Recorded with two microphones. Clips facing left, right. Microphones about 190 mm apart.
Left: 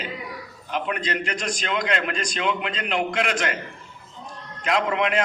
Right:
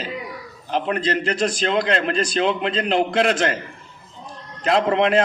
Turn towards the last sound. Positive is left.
turn(degrees=-35)  # may be behind; listen again after turning